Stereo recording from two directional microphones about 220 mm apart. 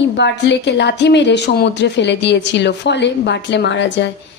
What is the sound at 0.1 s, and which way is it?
A woman's voice, 50° left (ahead or behind).